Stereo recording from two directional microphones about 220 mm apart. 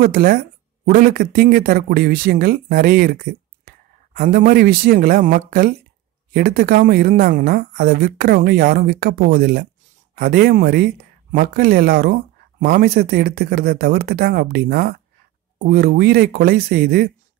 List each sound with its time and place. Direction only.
0.0 s speech: 40° right (ahead or behind)